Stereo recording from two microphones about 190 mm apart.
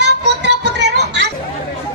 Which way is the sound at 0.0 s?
65° right (ahead or behind).